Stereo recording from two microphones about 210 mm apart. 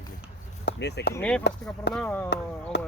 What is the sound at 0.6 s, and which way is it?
Speech, 55° left (ahead or behind).